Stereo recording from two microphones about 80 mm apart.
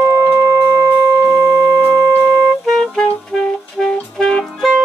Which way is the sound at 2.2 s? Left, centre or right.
Centre.